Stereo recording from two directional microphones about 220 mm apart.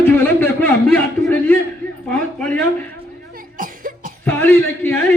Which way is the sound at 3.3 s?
40° right (ahead or behind).